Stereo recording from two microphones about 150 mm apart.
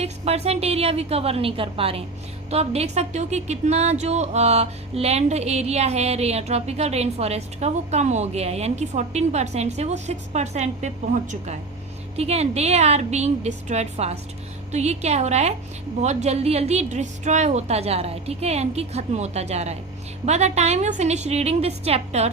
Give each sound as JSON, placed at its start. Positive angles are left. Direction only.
{"t": 0.0, "sound": "a woman's voice", "side_deg": -45}